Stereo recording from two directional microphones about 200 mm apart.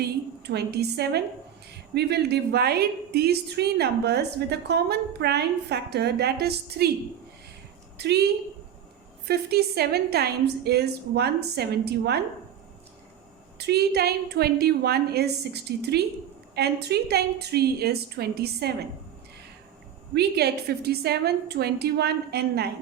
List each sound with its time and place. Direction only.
0.0 s a woman's voice: 55° right (ahead or behind)
7.9 s a woman's voice: 55° right (ahead or behind)
13.6 s a woman's voice: 55° right (ahead or behind)
20.1 s a woman's voice: 55° right (ahead or behind)